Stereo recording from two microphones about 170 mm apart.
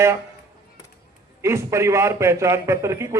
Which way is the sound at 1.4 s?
15° right (ahead or behind).